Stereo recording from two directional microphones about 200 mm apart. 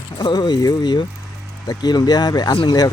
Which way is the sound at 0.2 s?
20° left (ahead or behind).